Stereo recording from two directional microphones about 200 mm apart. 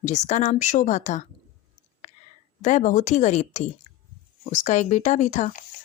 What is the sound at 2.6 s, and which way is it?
Speech, 40° left (ahead or behind).